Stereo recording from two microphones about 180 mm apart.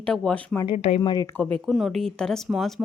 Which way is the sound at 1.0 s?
20° left (ahead or behind).